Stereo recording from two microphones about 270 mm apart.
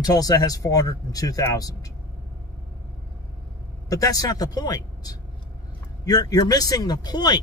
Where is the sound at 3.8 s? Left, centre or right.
Centre.